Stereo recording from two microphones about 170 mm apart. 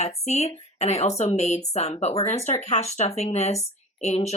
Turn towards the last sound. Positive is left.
turn(degrees=40)  # may be behind; listen again after turning